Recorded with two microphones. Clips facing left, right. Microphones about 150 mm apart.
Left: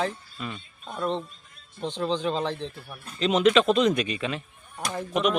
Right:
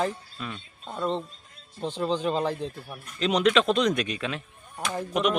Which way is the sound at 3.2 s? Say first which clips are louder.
Left 2 dB; centre (ahead or behind).